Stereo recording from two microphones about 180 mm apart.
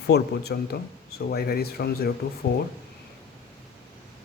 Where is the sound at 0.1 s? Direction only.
65° left (ahead or behind).